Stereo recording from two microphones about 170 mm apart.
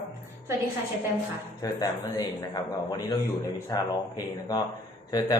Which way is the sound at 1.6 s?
20° left (ahead or behind).